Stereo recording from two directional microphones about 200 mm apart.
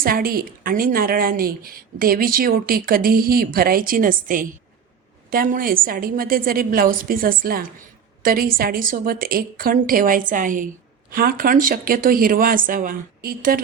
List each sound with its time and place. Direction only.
0.0 s speech: 45° right (ahead or behind)